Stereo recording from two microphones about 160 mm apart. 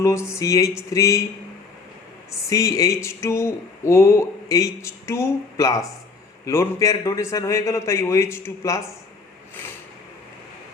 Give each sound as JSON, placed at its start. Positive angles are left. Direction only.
{"t": 0.0, "sound": "a man's voice", "side_deg": 15}
{"t": 2.5, "sound": "a man's voice", "side_deg": 20}